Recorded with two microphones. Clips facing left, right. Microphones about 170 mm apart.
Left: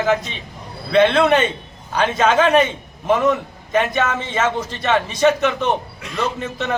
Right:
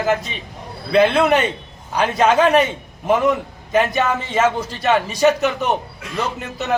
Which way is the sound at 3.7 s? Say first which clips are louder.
Right 1 dB; 5° right (ahead or behind).